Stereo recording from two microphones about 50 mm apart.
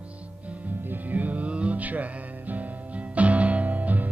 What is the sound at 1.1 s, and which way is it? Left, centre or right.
Music, right.